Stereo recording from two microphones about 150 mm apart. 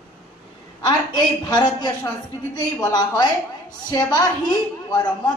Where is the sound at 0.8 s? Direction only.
30° left (ahead or behind).